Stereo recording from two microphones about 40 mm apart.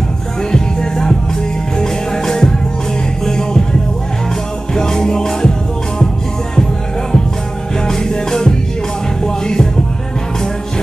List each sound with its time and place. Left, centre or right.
0.5 s music: centre
4.7 s music: centre
7.8 s music: centre